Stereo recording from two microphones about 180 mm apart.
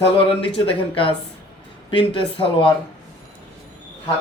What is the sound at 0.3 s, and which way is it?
A man's voice, 30° left (ahead or behind).